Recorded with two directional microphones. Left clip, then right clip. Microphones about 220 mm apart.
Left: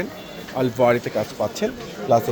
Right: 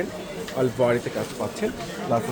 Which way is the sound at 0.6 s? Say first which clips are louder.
Left 4 dB; 45° left (ahead or behind).